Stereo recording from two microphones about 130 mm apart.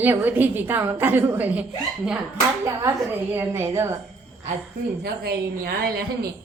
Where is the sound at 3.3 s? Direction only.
20° right (ahead or behind).